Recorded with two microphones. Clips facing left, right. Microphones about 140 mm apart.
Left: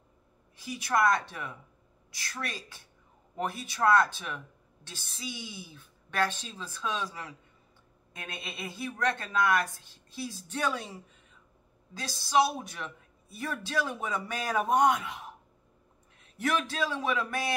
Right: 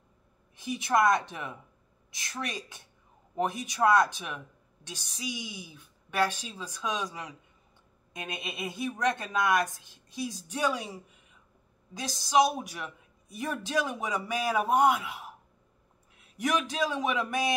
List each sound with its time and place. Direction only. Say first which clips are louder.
0.6 s speech: right 2 dB; 20° right (ahead or behind)